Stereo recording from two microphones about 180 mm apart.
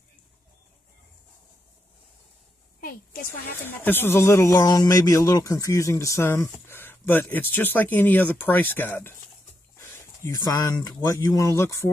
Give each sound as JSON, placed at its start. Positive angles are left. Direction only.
{"t": 3.6, "sound": "speech", "side_deg": 10}